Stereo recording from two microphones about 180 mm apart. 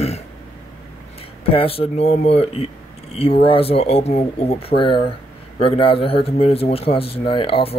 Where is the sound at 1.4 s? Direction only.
30° left (ahead or behind).